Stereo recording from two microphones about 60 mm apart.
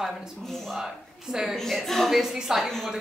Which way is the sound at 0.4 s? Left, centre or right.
Centre.